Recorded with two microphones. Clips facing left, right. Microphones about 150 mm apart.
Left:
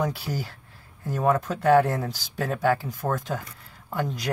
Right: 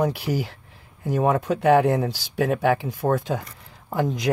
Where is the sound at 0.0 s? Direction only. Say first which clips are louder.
Right 5 dB; 10° right (ahead or behind).